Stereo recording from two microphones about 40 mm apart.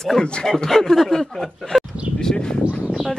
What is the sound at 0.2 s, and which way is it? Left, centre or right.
Speech, left.